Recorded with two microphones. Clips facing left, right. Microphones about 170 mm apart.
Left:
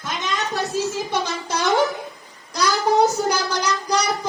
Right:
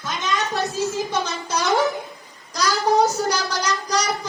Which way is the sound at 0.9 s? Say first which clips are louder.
Even; 15° left (ahead or behind).